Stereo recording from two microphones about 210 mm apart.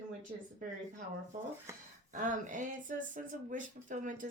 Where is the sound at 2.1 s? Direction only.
40° right (ahead or behind).